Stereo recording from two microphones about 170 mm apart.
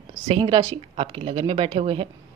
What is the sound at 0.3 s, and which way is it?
Speech, 30° right (ahead or behind).